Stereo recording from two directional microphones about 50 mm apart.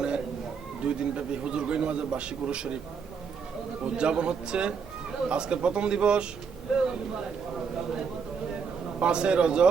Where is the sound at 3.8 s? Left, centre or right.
Right.